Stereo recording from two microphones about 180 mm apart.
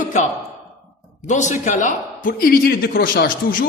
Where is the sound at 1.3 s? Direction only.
40° left (ahead or behind).